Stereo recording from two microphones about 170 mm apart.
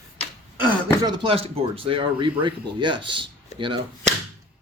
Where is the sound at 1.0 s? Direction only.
30° right (ahead or behind).